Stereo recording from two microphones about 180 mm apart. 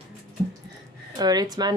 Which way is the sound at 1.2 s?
20° right (ahead or behind).